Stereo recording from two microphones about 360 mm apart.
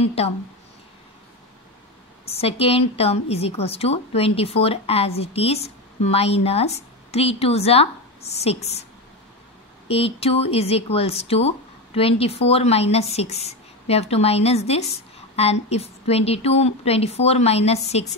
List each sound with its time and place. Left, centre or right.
0.0 s a woman's voice: centre
2.2 s a woman's voice: centre
9.8 s a woman's voice: centre